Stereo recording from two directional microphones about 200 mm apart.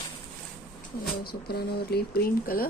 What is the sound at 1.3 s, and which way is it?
Speech, 50° left (ahead or behind).